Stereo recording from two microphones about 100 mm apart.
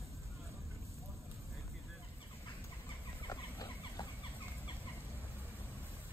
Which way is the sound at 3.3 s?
35° left (ahead or behind).